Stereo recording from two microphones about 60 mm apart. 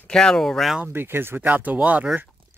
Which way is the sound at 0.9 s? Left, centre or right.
Right.